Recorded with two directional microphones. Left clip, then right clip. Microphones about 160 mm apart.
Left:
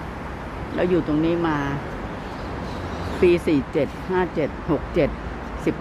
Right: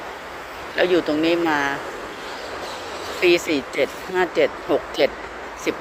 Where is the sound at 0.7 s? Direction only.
15° right (ahead or behind).